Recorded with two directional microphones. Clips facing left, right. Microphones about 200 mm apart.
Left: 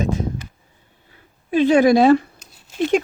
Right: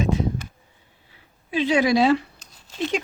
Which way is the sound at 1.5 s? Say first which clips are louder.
Left 6 dB; 50° left (ahead or behind).